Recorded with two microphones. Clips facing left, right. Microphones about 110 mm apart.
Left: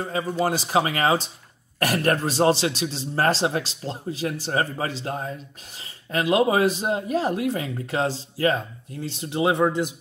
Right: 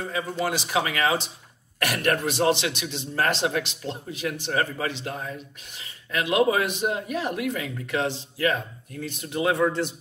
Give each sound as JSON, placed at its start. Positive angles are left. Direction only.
{"t": 0.1, "sound": "speech", "side_deg": 35}